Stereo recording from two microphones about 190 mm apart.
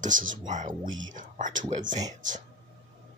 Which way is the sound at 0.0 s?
45° right (ahead or behind).